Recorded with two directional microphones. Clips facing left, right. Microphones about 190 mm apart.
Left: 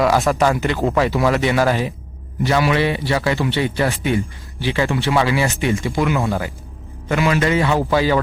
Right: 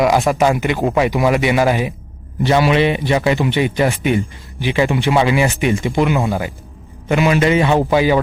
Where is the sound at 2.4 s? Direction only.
25° right (ahead or behind).